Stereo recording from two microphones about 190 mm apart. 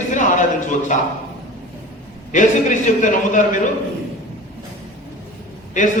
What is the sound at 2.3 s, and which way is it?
A man's voice, 45° left (ahead or behind).